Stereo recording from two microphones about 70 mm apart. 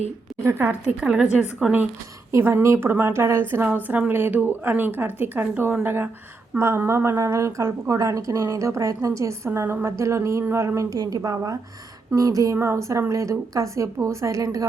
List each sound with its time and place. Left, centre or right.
0.6 s speech: right
1.0 s a woman's voice: centre
2.4 s a woman's voice: right
10.8 s a woman's voice: right